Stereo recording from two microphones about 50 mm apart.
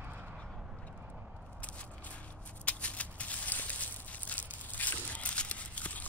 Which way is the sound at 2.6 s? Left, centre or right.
Left.